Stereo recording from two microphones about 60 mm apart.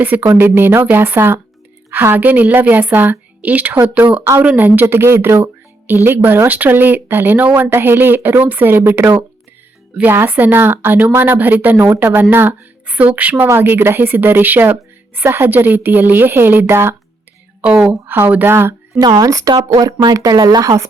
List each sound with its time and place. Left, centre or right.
0.0 s a woman's voice: right
12.9 s a woman's voice: right
18.0 s a woman's voice: right
18.9 s a woman's voice: right